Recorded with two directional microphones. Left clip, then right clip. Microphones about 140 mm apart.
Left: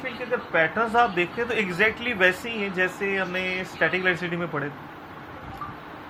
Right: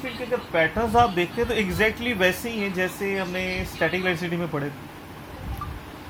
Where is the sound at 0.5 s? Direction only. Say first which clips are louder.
Right 1 dB; 45° right (ahead or behind).